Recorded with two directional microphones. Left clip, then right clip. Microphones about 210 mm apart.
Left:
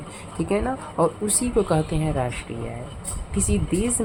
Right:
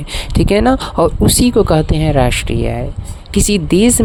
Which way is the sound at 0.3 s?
50° right (ahead or behind).